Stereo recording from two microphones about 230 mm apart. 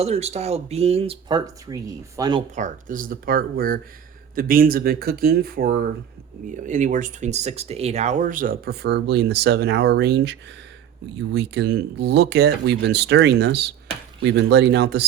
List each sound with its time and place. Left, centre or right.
0.0 s speech: right
2.6 s speech: right